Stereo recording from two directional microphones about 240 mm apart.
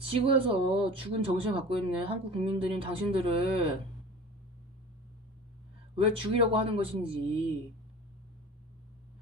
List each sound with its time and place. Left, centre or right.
0.3 s speech: right
6.0 s speech: right